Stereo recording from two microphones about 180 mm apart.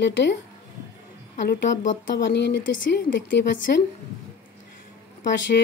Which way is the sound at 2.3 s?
70° left (ahead or behind).